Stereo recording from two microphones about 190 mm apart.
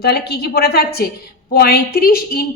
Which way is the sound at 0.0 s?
60° left (ahead or behind).